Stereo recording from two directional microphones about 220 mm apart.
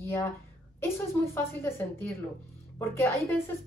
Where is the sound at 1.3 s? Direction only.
10° left (ahead or behind).